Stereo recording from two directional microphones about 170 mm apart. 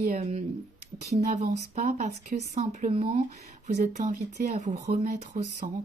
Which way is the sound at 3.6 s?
45° right (ahead or behind).